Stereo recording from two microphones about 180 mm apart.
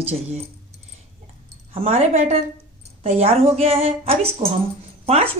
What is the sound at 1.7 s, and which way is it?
Speech, 35° right (ahead or behind).